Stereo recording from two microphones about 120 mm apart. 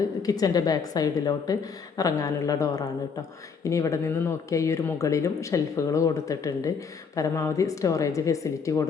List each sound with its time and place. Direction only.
0.2 s a woman's voice: 30° left (ahead or behind)